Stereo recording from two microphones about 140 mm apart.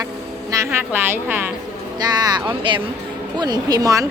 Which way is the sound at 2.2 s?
35° right (ahead or behind).